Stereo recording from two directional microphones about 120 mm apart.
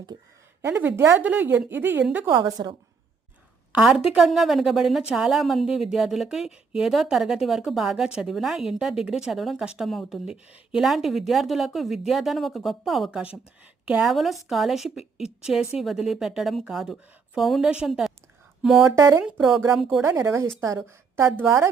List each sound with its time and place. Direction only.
0.1 s a woman's voice: 40° right (ahead or behind)
0.6 s a woman's voice: 20° right (ahead or behind)
2.3 s a woman's voice: 35° right (ahead or behind)
3.7 s a woman's voice: 5° right (ahead or behind)
18.9 s a woman's voice: 25° right (ahead or behind)
19.2 s a woman's voice: 5° right (ahead or behind)
20.0 s a woman's voice: 20° right (ahead or behind)